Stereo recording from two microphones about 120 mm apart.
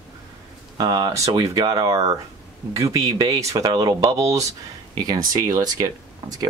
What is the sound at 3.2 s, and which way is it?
Speech, 30° right (ahead or behind).